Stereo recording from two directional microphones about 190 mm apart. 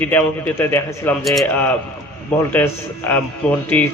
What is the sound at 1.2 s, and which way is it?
Speech, centre (ahead or behind).